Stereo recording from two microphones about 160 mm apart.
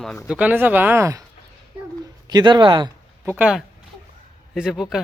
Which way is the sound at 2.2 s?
25° right (ahead or behind).